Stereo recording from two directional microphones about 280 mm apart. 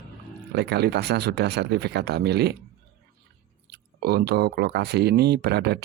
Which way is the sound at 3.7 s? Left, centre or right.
Right.